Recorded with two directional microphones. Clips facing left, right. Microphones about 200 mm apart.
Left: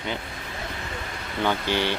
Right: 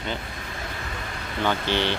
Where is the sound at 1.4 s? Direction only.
10° left (ahead or behind).